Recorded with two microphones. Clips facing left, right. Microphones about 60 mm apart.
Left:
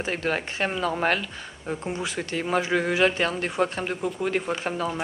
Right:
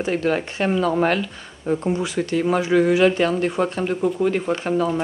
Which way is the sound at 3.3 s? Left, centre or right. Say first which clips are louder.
Right 5 dB; centre.